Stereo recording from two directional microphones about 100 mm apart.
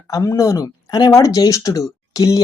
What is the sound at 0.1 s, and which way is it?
Speech, 35° left (ahead or behind).